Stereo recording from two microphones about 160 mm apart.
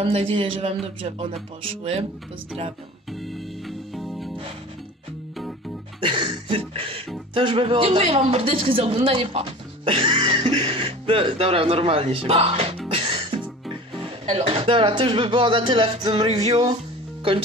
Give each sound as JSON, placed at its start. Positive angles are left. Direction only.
{"t": 0.0, "sound": "a woman's voice", "side_deg": -35}
{"t": 3.6, "sound": "music", "side_deg": 0}
{"t": 5.9, "sound": "a sound", "side_deg": -35}
{"t": 7.3, "sound": "a woman's voice", "side_deg": -35}
{"t": 12.9, "sound": "music", "side_deg": -35}
{"t": 14.2, "sound": "a woman's voice", "side_deg": -35}